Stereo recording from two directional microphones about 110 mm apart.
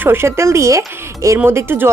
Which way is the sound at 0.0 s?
20° right (ahead or behind).